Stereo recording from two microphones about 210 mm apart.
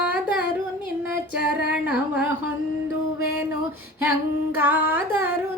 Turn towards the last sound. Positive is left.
turn(degrees=-10)  # may be behind; listen again after turning